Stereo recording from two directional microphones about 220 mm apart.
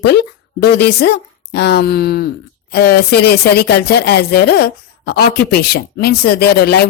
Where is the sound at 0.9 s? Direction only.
45° left (ahead or behind).